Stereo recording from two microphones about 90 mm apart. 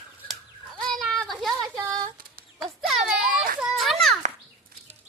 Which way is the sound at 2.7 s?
Centre (ahead or behind).